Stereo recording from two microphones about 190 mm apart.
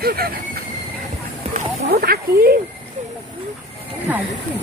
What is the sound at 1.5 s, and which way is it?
Speech, 50° right (ahead or behind).